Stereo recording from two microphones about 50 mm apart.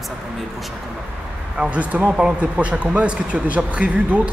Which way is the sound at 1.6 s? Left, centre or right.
Right.